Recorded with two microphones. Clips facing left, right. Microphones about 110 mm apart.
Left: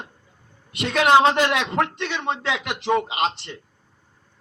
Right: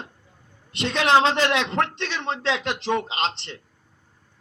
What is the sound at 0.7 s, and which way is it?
Speech, 30° right (ahead or behind).